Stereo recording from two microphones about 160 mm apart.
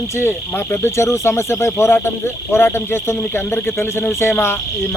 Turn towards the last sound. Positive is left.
turn(degrees=15)  # may be behind; listen again after turning